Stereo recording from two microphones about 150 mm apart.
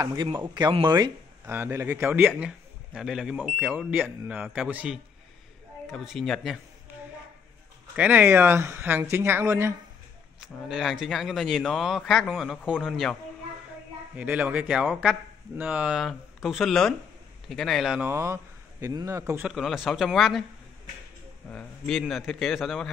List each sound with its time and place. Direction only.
0.0 s speech: 25° right (ahead or behind)
1.4 s a man's voice: 15° right (ahead or behind); by 6.6 s centre (ahead or behind)
7.9 s a man's voice: 10° right (ahead or behind)
10.4 s speech: 5° right (ahead or behind)
14.1 s speech: 10° right (ahead or behind)
18.0 s speech: 15° right (ahead or behind)
19.4 s speech: centre (ahead or behind)
21.5 s speech: 5° left (ahead or behind)